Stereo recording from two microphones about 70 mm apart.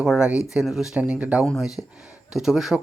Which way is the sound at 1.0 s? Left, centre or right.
Right.